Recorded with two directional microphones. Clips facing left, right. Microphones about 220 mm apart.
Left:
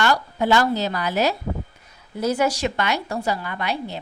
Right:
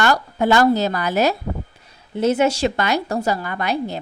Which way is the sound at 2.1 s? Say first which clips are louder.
Right 4 dB; 25° right (ahead or behind).